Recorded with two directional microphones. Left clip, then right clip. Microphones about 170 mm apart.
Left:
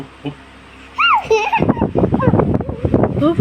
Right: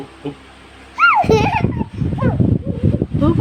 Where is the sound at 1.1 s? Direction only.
30° right (ahead or behind).